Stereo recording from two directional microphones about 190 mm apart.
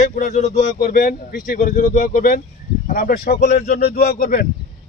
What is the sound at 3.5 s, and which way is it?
Speech, 40° left (ahead or behind).